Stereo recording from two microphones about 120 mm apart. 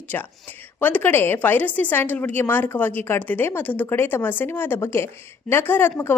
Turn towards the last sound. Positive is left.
turn(degrees=20)  # may be behind; listen again after turning